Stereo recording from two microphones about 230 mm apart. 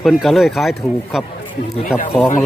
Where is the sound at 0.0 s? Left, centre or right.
Centre.